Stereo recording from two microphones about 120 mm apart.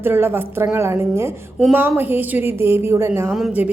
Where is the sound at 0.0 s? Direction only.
15° right (ahead or behind).